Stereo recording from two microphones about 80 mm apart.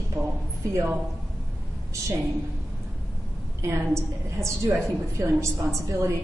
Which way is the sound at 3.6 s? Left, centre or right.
Right.